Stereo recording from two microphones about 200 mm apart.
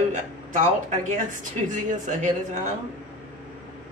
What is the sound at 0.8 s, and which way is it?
A woman's voice, 40° right (ahead or behind).